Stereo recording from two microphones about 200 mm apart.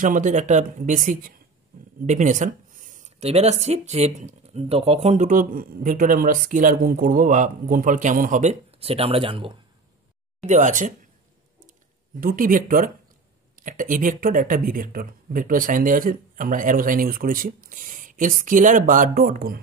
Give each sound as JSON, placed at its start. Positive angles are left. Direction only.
{"t": 0.0, "sound": "speech", "side_deg": -40}
{"t": 10.4, "sound": "speech", "side_deg": -35}
{"t": 12.2, "sound": "speech", "side_deg": -45}